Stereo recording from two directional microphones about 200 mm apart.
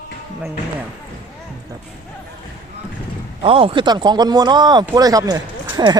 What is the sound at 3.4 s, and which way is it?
Speech, 25° right (ahead or behind).